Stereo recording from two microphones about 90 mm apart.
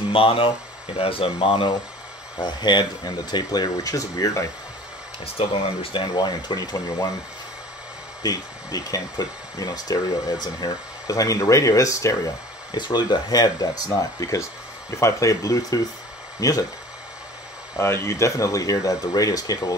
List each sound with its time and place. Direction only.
0.1 s speech: 90° left
2.3 s speech: 55° left (ahead or behind); by 4.5 s 40° left (ahead or behind)
5.2 s speech: 90° left
6.1 s speech: 50° left (ahead or behind)
8.2 s speech: 45° left (ahead or behind)
12.7 s speech: 55° left (ahead or behind)
17.7 s speech: 30° left (ahead or behind)